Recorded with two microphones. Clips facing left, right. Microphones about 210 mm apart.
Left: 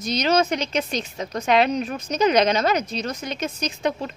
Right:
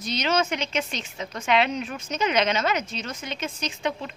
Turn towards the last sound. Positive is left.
turn(degrees=40)  # may be behind; listen again after turning